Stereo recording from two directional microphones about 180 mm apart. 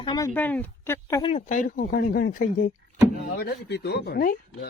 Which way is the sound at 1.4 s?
45° left (ahead or behind).